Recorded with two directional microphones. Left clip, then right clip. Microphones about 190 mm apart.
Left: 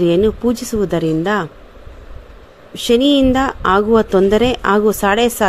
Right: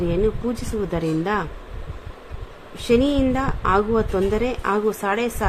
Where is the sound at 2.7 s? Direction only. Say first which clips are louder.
Left 6 dB; 40° left (ahead or behind).